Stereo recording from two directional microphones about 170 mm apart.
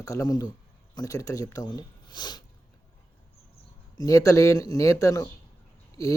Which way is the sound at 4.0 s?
20° left (ahead or behind).